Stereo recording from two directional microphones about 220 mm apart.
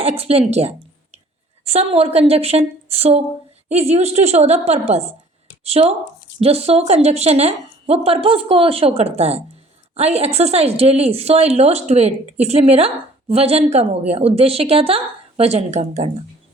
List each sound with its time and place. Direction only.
0.0 s a woman's voice: 25° right (ahead or behind)